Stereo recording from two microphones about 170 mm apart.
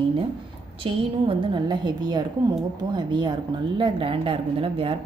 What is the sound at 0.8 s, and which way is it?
A woman's voice, 30° right (ahead or behind).